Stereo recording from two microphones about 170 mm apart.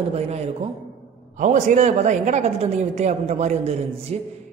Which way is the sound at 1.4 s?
45° right (ahead or behind).